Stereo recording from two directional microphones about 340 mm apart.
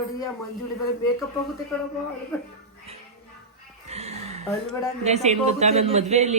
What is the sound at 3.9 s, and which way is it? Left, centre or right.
Music, centre.